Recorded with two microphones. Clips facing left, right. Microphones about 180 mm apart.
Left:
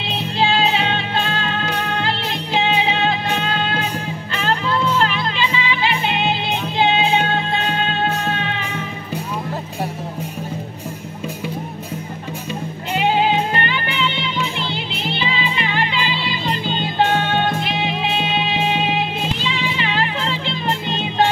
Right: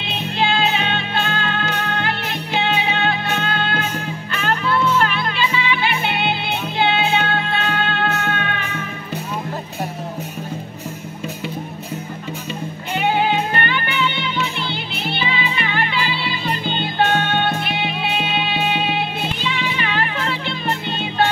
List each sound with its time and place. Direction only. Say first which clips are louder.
0.1 s music: left 1 dB; 35° left (ahead or behind)
13.8 s music: right 1 dB; 30° left (ahead or behind)
14.9 s music: left 1 dB; 90° left
18.5 s music: left 1 dB; 25° left (ahead or behind)